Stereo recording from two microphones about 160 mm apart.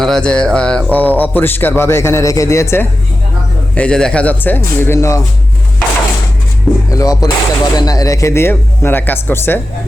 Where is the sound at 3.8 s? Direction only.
5° left (ahead or behind).